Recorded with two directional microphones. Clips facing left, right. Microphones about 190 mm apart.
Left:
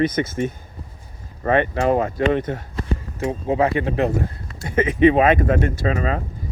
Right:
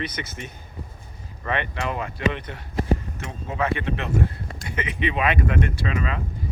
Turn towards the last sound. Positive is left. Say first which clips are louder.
# left 5 dB
turn(degrees=40)  # may be behind; listen again after turning